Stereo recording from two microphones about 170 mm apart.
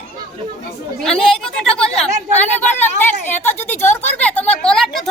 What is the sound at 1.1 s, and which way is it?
Speech, 5° left (ahead or behind).